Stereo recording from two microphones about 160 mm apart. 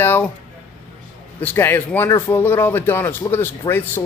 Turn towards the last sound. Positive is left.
turn(degrees=15)  # may be behind; listen again after turning